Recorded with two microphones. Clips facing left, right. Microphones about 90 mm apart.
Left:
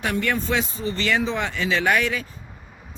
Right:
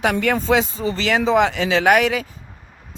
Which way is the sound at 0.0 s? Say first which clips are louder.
Right 5 dB; 90° right.